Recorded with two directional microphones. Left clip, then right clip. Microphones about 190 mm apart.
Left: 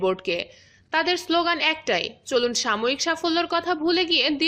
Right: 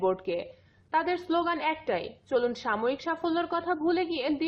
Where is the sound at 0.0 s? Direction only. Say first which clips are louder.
Left 4 dB; 25° left (ahead or behind).